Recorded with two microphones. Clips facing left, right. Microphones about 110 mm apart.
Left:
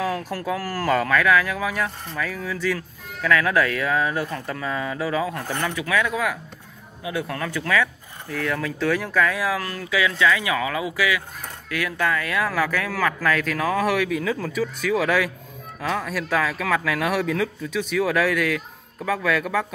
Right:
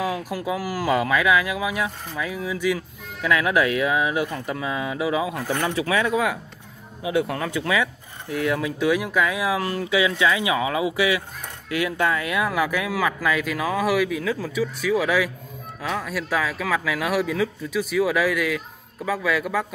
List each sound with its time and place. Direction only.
0.0 s speech: 10° right (ahead or behind)